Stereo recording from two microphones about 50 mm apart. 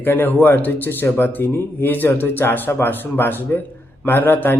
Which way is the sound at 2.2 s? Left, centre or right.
Left.